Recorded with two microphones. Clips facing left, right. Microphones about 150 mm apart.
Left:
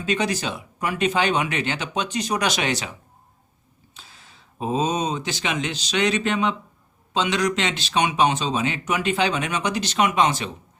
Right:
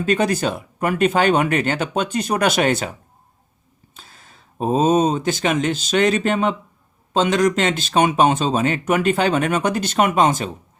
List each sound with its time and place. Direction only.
0.0 s speech: 55° right (ahead or behind)
3.9 s speech: 50° right (ahead or behind)